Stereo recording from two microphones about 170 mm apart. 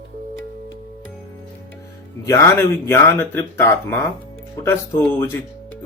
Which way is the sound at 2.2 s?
15° left (ahead or behind).